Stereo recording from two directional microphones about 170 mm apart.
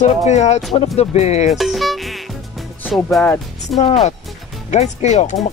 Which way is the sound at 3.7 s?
40° left (ahead or behind).